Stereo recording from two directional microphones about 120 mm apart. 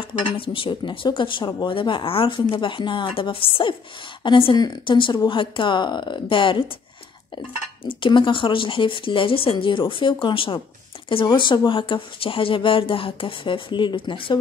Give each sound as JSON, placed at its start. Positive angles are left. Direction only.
{"t": 0.0, "sound": "speech", "side_deg": 45}
{"t": 7.8, "sound": "speech", "side_deg": 45}